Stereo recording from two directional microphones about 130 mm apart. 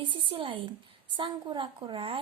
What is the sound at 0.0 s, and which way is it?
Speech, 40° right (ahead or behind).